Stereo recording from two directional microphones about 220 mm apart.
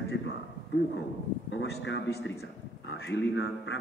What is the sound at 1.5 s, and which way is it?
Speech, 55° left (ahead or behind).